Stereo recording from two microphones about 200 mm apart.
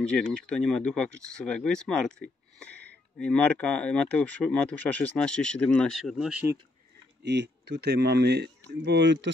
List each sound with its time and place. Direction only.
0.0 s speech: 5° left (ahead or behind)
7.2 s speech: 55° right (ahead or behind)